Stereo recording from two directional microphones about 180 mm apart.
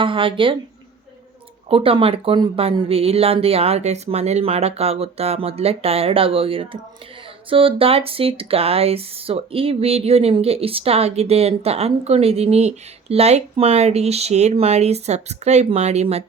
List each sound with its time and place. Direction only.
0.0 s speech: 30° right (ahead or behind)
1.7 s speech: 30° right (ahead or behind)